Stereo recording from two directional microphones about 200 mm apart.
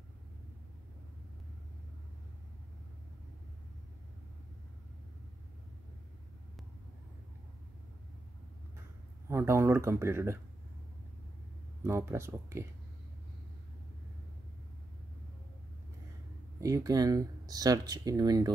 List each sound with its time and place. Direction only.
9.3 s speech: 10° right (ahead or behind)
11.8 s speech: 10° right (ahead or behind)
16.5 s speech: 15° right (ahead or behind)